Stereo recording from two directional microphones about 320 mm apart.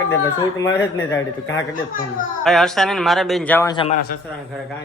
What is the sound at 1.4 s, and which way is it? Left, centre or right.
Speech, left.